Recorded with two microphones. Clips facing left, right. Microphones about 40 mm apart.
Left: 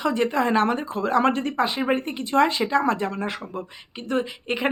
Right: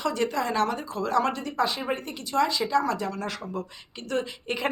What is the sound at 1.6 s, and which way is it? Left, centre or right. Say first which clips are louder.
A woman's voice: left 4 dB; left.